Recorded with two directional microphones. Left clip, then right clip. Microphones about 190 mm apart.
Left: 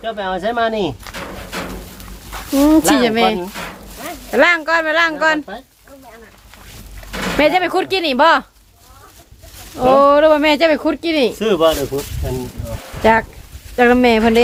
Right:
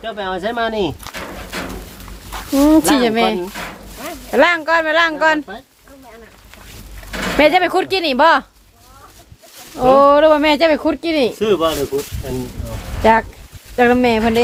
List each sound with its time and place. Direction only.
0.0 s speech: 25° left (ahead or behind)
2.5 s speech: centre (ahead or behind)
7.3 s speech: 10° right (ahead or behind)
9.7 s speech: 5° right (ahead or behind)
11.3 s speech: 55° left (ahead or behind)
13.0 s speech: centre (ahead or behind)
13.7 s speech: 10° left (ahead or behind)